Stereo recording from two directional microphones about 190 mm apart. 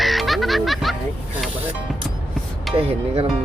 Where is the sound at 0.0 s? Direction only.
Centre (ahead or behind).